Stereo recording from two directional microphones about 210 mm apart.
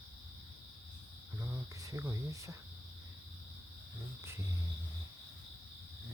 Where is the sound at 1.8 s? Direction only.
15° right (ahead or behind).